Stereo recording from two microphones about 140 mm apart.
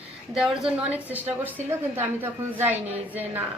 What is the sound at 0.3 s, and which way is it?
Speech, 5° right (ahead or behind).